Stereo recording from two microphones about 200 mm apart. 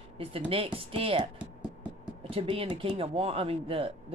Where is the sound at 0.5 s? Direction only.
25° right (ahead or behind).